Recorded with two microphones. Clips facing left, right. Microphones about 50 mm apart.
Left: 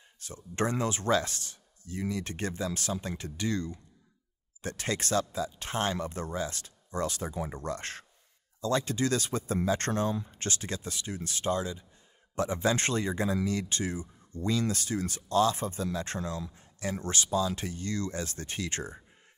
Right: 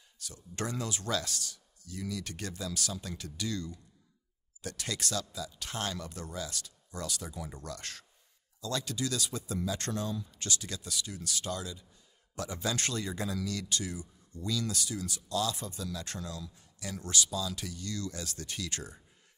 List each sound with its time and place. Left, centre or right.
0.2 s speech: left